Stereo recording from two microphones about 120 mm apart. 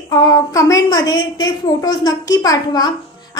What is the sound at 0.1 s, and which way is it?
A woman's voice, 35° left (ahead or behind).